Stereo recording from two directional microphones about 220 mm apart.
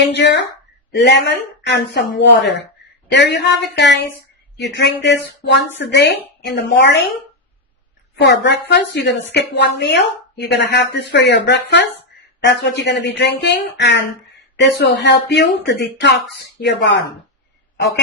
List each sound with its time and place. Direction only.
0.1 s speech: 50° left (ahead or behind)
8.1 s speech: 50° left (ahead or behind)